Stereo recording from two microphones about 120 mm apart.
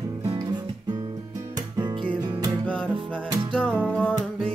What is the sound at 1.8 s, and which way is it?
Music, 40° right (ahead or behind).